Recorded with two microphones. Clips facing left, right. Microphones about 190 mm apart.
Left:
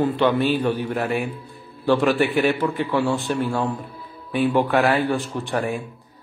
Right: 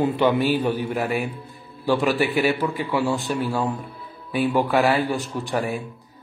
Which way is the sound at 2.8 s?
15° right (ahead or behind).